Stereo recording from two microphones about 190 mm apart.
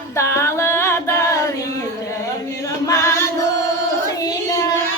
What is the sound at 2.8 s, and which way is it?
Music, 15° left (ahead or behind).